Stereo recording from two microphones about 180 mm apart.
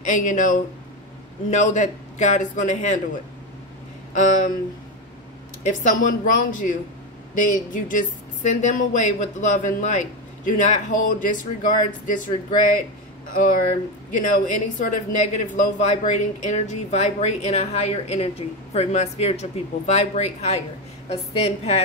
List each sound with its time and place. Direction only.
0.0 s speech: 45° left (ahead or behind)
4.1 s a sound: 45° left (ahead or behind)
5.7 s speech: 45° left (ahead or behind)